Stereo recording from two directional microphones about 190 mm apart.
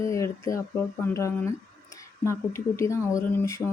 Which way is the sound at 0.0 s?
15° left (ahead or behind).